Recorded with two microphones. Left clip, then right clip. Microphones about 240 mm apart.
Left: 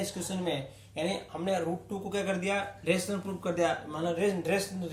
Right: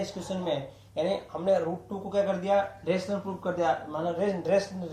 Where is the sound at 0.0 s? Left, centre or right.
Left.